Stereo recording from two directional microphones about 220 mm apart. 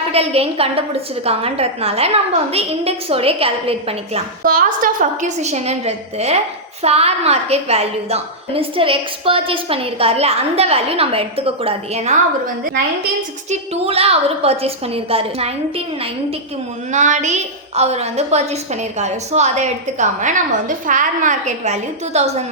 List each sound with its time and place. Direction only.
0.0 s a woman's voice: 25° right (ahead or behind)
4.4 s a woman's voice: 40° right (ahead or behind)
13.5 s a woman's voice: 25° right (ahead or behind)
16.9 s a woman's voice: 35° right (ahead or behind)